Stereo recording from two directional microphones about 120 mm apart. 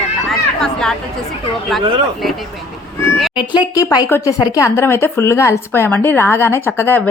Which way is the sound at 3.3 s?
40° left (ahead or behind).